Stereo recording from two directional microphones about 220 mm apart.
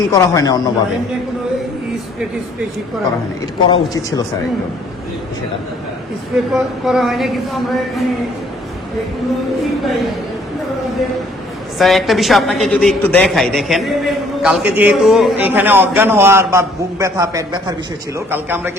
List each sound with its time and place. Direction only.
0.0 s speech: 15° left (ahead or behind)
3.7 s speech: 15° left (ahead or behind)
6.3 s a woman's voice: centre (ahead or behind)
11.8 s a woman's voice: centre (ahead or behind)